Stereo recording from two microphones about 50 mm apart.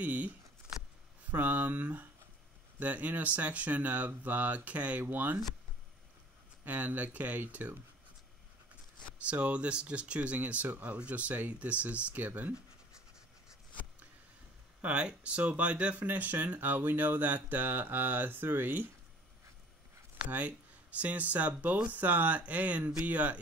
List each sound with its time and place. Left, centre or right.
0.0 s a sound: right
1.3 s speech: right
6.6 s speech: right
9.2 s speech: right
14.8 s speech: right
20.2 s speech: right